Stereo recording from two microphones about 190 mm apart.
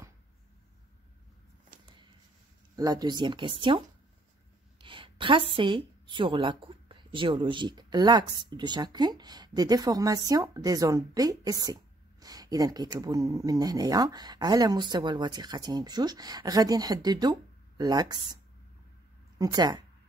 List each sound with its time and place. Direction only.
1.7 s a sound: 45° right (ahead or behind)
2.7 s a woman's voice: 20° right (ahead or behind)
4.8 s a woman's voice: 25° right (ahead or behind)